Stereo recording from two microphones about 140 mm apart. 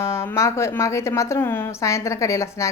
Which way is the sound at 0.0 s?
20° left (ahead or behind).